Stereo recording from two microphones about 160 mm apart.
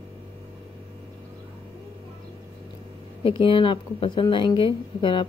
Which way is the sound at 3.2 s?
30° left (ahead or behind).